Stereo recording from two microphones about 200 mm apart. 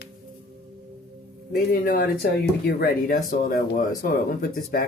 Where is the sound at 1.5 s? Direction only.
45° left (ahead or behind).